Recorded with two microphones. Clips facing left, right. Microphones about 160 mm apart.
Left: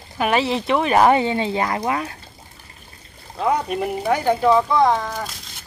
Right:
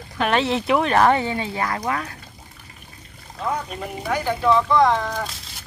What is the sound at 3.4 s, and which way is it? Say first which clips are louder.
Speech: left 6 dB; 70° left (ahead or behind).